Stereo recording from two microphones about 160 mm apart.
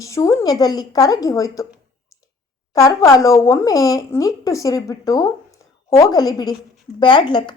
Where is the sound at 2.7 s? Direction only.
20° left (ahead or behind).